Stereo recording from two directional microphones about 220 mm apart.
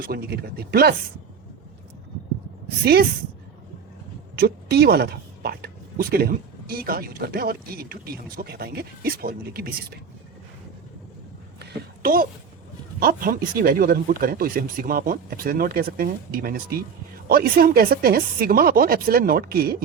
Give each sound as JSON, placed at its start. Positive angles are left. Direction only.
{"t": 0.0, "sound": "a woman's voice", "side_deg": -45}
{"t": 2.6, "sound": "a woman's voice", "side_deg": -45}
{"t": 4.4, "sound": "a woman's voice", "side_deg": -45}
{"t": 11.6, "sound": "a woman's voice", "side_deg": -40}